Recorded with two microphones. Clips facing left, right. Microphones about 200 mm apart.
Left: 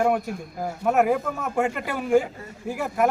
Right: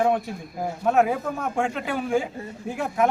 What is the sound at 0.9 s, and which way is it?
A man's voice, 5° left (ahead or behind).